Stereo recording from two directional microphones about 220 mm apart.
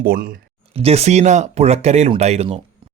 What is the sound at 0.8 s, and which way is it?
Speech, 30° right (ahead or behind).